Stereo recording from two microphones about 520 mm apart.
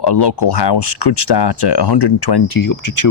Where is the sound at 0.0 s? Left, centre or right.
Left.